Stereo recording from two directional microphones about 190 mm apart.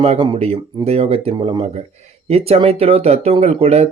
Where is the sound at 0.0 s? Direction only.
30° right (ahead or behind).